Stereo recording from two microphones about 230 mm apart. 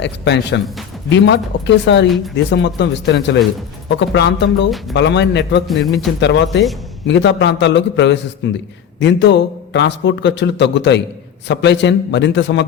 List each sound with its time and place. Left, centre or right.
0.0 s speech: left
2.0 s speech: centre
2.3 s speech: left